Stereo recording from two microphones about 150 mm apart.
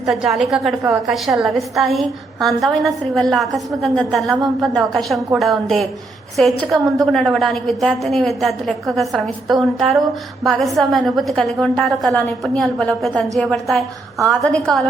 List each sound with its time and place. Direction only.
0.0 s a woman's voice: centre (ahead or behind)